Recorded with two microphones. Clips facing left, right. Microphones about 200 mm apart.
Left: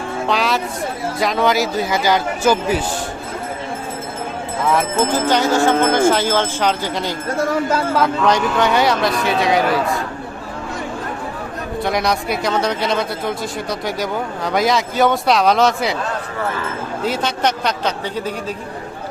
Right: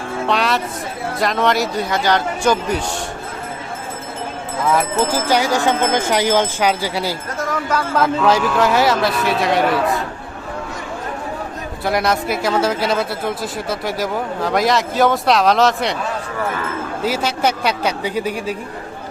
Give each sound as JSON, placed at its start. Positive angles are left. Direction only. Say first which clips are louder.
{"t": 0.3, "sound": "speech", "louder": "even", "side_deg": 0}
{"t": 4.6, "sound": "speech", "louder": "even", "side_deg": 0}
{"t": 5.3, "sound": "speech", "louder": "left 2 dB", "side_deg": -10}
{"t": 7.3, "sound": "speech", "louder": "left 5 dB", "side_deg": 30}
{"t": 7.9, "sound": "speech", "louder": "right 3 dB", "side_deg": -5}
{"t": 11.8, "sound": "speech", "louder": "right 1 dB", "side_deg": 0}
{"t": 17.1, "sound": "speech", "louder": "right 1 dB", "side_deg": -5}